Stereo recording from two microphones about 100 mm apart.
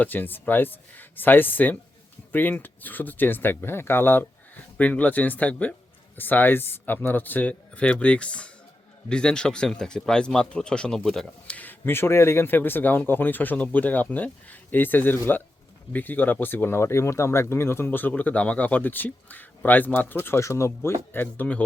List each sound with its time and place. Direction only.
0.0 s speech: 20° left (ahead or behind)
11.5 s speech: 20° left (ahead or behind)